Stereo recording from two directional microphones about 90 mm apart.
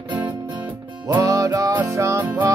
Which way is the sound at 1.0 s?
40° right (ahead or behind).